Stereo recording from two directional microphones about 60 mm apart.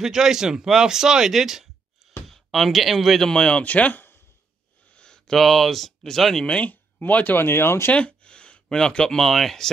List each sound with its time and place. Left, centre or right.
0.0 s speech: centre
3.3 s speech: centre
4.9 s a sound: centre
5.3 s speech: centre
6.4 s speech: centre
6.7 s speech: left
7.3 s speech: left
7.9 s speech: centre